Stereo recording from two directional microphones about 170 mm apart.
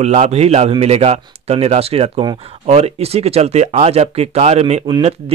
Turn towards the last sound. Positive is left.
turn(degrees=-35)  # may be behind; listen again after turning